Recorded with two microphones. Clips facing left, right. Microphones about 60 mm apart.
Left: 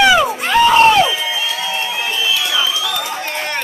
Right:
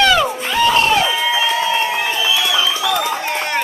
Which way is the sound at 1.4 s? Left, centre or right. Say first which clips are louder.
Right 5 dB; right.